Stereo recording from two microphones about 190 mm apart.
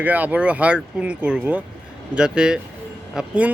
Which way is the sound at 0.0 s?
10° right (ahead or behind).